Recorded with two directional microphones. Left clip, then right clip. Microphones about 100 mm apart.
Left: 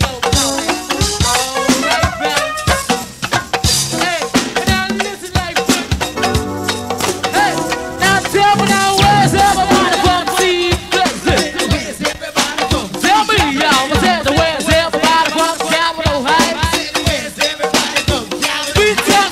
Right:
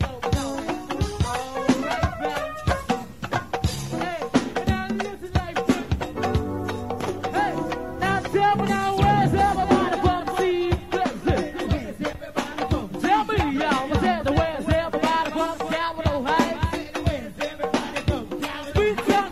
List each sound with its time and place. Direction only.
0.0 s music: 50° right (ahead or behind)
7.0 s music: 50° right (ahead or behind)